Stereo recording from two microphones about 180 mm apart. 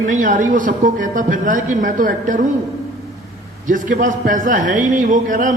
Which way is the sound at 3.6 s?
45° right (ahead or behind).